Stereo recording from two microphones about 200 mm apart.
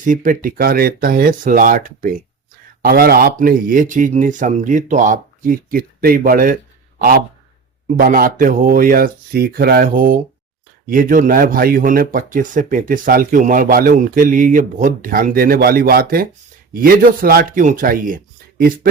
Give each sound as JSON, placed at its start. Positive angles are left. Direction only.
{"t": 0.0, "sound": "speech", "side_deg": -40}
{"t": 7.9, "sound": "speech", "side_deg": -45}